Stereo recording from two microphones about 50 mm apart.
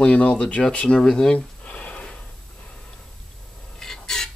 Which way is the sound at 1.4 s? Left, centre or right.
Left.